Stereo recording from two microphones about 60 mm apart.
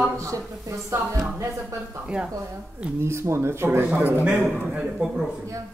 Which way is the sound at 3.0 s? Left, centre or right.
Right.